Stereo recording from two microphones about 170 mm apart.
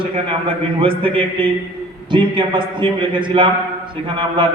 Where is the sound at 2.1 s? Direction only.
30° right (ahead or behind).